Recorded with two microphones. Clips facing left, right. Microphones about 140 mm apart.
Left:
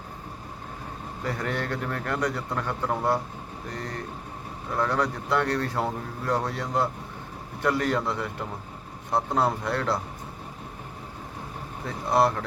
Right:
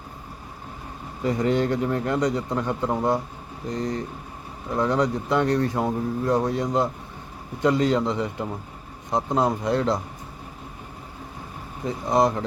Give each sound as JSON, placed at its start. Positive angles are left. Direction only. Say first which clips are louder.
{"t": 1.2, "sound": "speech", "louder": "right 8 dB", "side_deg": -20}
{"t": 11.9, "sound": "speech", "louder": "right 2 dB", "side_deg": -15}